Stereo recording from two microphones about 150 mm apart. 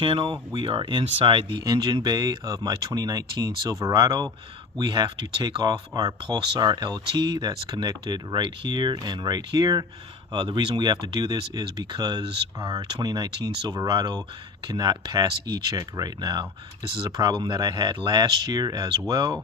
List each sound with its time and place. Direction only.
0.0 s speech: 35° right (ahead or behind)